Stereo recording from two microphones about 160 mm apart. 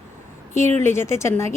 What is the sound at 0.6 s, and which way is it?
Speech, 45° right (ahead or behind).